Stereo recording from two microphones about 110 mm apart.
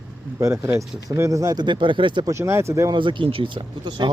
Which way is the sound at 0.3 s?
25° right (ahead or behind).